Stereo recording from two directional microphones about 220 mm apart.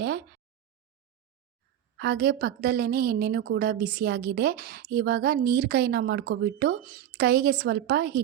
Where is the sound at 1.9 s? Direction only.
50° right (ahead or behind).